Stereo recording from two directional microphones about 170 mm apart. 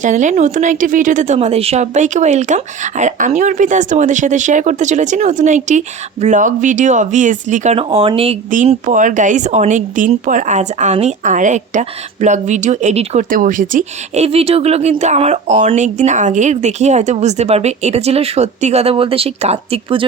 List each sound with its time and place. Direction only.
0.0 s a woman's voice: 45° right (ahead or behind)
8.4 s a woman's voice: 50° right (ahead or behind)